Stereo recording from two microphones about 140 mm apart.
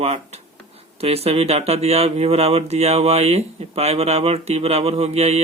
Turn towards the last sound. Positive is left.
turn(degrees=-50)  # may be behind; listen again after turning